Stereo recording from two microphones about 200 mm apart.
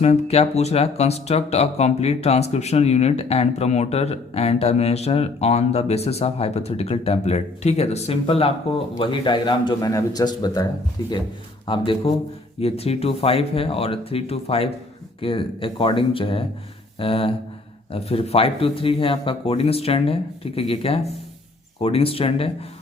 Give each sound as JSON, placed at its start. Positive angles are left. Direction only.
{"t": 0.0, "sound": "speech", "side_deg": 30}
{"t": 11.6, "sound": "speech", "side_deg": 25}